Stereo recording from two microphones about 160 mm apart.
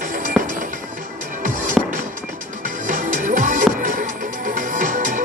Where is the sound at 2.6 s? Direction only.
55° right (ahead or behind).